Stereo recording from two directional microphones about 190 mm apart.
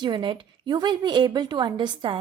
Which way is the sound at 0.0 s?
25° right (ahead or behind).